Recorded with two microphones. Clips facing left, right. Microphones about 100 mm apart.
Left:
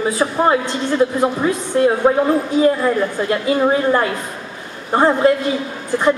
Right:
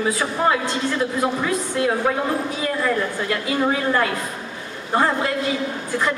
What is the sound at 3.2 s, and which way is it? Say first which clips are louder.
A woman's voice: left 6 dB; 30° left (ahead or behind).